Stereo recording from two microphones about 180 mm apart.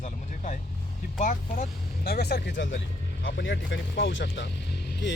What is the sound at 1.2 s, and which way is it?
Speech, 45° left (ahead or behind).